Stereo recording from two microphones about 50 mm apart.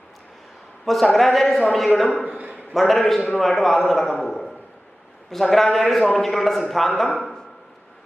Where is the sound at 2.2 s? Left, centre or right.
Right.